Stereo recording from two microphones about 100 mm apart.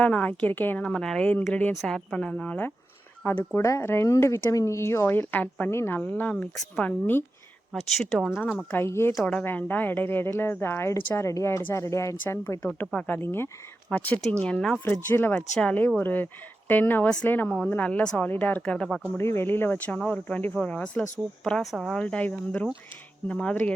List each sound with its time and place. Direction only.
0.0 s speech: 15° left (ahead or behind)
0.9 s speech: 5° left (ahead or behind)
1.7 s a woman's voice: centre (ahead or behind); by 7.3 s 20° left (ahead or behind)
8.3 s a woman's voice: 20° left (ahead or behind)
15.0 s a woman's voice: 20° left (ahead or behind)
15.4 s a woman's voice: 10° left (ahead or behind)
19.1 s a woman's voice: 25° left (ahead or behind); by 22.0 s centre (ahead or behind)
22.0 s speech: 10° left (ahead or behind)